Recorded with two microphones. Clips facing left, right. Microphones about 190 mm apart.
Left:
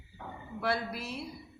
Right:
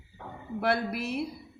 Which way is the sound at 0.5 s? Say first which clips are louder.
Right 5 dB; 60° right (ahead or behind).